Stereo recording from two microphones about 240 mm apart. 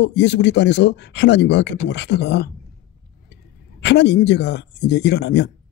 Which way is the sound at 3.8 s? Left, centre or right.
Left.